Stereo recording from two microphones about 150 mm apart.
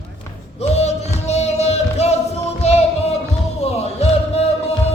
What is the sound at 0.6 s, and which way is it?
Music, 45° left (ahead or behind).